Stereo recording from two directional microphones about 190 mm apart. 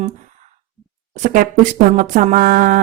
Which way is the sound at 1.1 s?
45° right (ahead or behind).